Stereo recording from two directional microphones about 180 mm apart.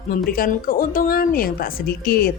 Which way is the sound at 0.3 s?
55° left (ahead or behind).